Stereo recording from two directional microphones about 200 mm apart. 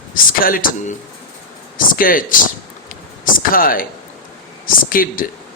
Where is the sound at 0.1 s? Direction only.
45° left (ahead or behind).